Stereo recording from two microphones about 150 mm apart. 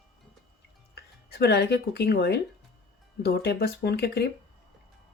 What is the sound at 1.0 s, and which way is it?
Speech, 90° left.